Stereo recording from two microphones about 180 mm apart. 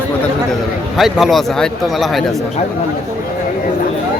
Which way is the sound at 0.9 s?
Centre (ahead or behind).